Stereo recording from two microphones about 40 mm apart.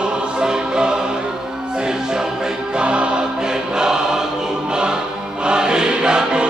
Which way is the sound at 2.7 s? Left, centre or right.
Right.